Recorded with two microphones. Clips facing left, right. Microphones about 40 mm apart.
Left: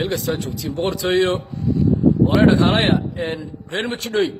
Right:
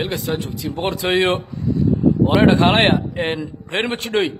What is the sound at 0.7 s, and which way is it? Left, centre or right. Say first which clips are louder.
Speech: even; right.